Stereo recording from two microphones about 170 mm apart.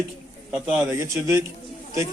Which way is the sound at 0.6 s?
5° right (ahead or behind).